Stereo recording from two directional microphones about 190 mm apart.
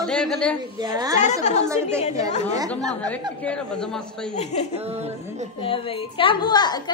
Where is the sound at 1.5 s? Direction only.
40° left (ahead or behind).